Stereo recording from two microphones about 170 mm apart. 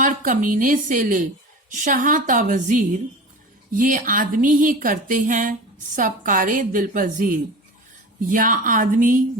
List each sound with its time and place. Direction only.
0.0 s speech: 50° right (ahead or behind)